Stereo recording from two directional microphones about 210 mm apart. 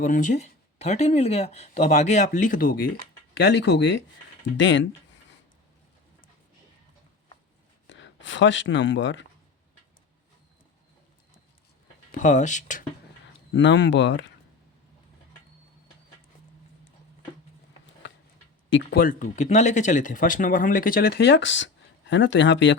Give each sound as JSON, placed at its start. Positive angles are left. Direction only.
{"t": 0.0, "sound": "speech", "side_deg": 40}
{"t": 3.3, "sound": "speech", "side_deg": 55}
{"t": 7.9, "sound": "speech", "side_deg": 60}
{"t": 12.1, "sound": "speech", "side_deg": 35}
{"t": 13.5, "sound": "speech", "side_deg": 60}
{"t": 18.7, "sound": "speech", "side_deg": 50}